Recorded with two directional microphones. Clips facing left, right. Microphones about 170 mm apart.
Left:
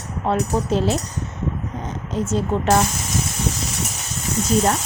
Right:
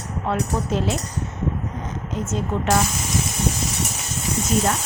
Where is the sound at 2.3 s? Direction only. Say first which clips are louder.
Left 3 dB; 35° left (ahead or behind).